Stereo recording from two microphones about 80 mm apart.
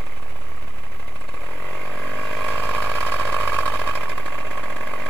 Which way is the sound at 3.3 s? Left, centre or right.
Left.